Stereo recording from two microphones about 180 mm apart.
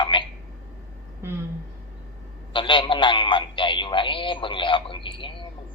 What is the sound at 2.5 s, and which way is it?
A man's voice, 30° left (ahead or behind).